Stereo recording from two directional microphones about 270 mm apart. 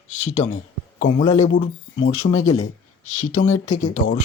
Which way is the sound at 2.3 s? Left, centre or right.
Left.